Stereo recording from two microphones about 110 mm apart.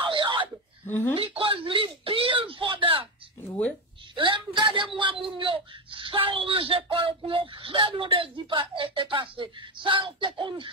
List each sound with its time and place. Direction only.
0.0 s a sound: 50° right (ahead or behind)
0.8 s speech: 15° left (ahead or behind)
1.1 s speech: 60° right (ahead or behind)
3.4 s speech: 15° left (ahead or behind)
4.1 s speech: 45° right (ahead or behind)